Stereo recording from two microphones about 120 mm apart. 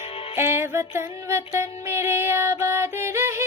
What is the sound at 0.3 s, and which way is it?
Music, 20° right (ahead or behind).